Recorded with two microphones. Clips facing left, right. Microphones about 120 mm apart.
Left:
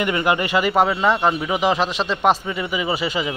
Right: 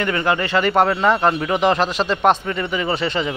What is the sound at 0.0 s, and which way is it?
A man's voice, 15° left (ahead or behind).